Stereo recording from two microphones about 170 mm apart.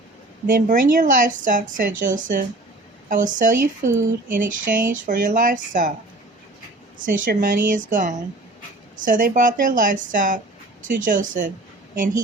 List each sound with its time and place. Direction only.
0.4 s speech: 55° right (ahead or behind)
7.0 s speech: 50° right (ahead or behind)